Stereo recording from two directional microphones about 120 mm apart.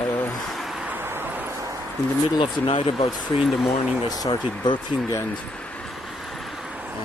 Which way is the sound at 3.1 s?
Centre (ahead or behind).